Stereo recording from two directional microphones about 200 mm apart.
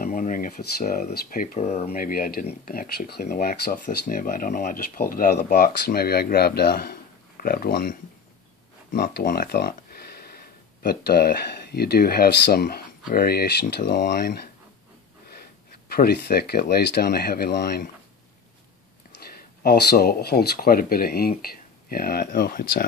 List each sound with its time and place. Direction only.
0.0 s speech: 40° left (ahead or behind)
15.9 s speech: 50° left (ahead or behind)
19.6 s speech: 50° left (ahead or behind)